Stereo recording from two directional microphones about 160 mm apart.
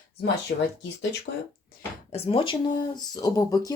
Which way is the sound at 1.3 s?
90° left.